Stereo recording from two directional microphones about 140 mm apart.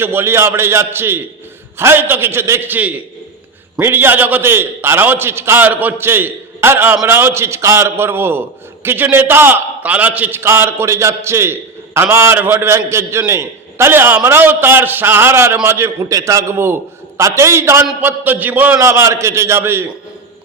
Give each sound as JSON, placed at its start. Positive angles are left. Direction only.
{"t": 0.0, "sound": "a man's voice", "side_deg": -15}